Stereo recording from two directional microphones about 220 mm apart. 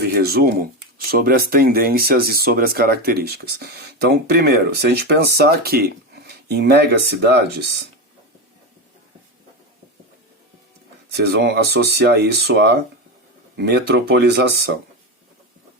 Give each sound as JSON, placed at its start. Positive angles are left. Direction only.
{"t": 0.0, "sound": "speech", "side_deg": -45}
{"t": 11.1, "sound": "speech", "side_deg": -45}